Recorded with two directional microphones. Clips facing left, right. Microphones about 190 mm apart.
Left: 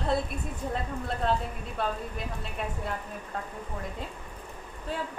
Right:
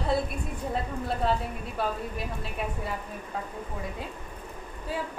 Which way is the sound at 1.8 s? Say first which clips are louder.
Right 1 dB; 5° right (ahead or behind).